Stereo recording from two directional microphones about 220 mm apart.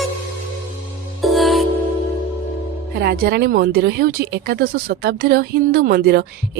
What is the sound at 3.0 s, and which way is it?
Speech, 45° right (ahead or behind).